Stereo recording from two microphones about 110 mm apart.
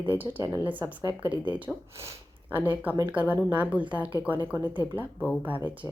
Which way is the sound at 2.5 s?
15° right (ahead or behind).